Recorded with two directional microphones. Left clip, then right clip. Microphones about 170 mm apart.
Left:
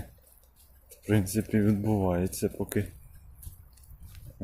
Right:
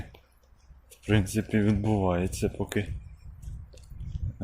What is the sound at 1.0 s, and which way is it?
Speech, 15° left (ahead or behind).